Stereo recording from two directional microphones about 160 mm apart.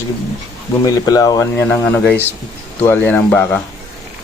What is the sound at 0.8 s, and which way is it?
Speech, 20° left (ahead or behind).